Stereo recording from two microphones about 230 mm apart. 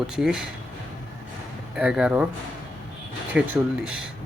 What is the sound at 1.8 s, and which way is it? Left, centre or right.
Speech, centre.